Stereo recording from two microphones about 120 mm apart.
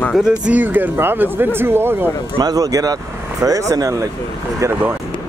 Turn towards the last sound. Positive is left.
turn(degrees=-25)  # may be behind; listen again after turning